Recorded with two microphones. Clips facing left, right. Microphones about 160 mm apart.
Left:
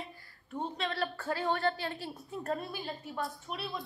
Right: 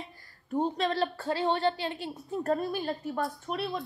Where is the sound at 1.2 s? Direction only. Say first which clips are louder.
Right 3 dB; 25° right (ahead or behind).